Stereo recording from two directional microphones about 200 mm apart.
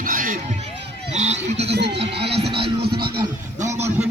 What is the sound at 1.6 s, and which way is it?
Speech, 60° right (ahead or behind).